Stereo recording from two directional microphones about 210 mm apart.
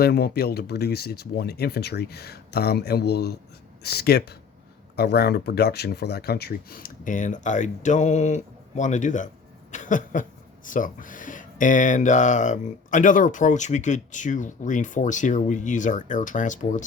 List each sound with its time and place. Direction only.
0.0 s speech: 50° left (ahead or behind)